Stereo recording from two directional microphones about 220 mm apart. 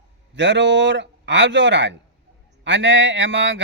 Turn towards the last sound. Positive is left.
turn(degrees=-55)  # may be behind; listen again after turning